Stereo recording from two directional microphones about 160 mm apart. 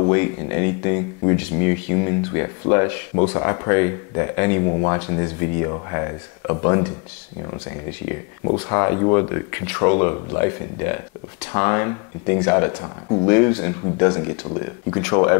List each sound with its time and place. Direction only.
0.0 s speech: 20° left (ahead or behind)
8.5 s speech: 25° left (ahead or behind)